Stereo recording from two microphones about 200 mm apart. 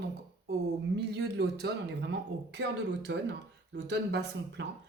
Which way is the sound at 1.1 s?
55° right (ahead or behind).